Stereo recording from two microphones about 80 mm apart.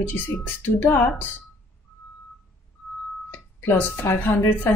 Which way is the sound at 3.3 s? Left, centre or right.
Left.